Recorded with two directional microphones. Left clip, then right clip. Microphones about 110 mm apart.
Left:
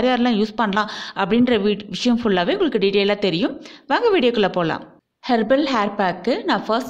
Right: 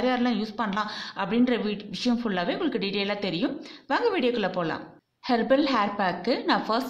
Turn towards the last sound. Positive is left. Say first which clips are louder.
# left 5 dB
turn(degrees=40)  # may be behind; listen again after turning